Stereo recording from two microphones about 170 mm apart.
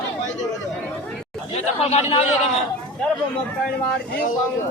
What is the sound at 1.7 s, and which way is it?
Speech, 40° left (ahead or behind).